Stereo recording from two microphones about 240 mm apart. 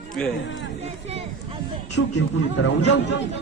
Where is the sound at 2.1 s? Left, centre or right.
Left.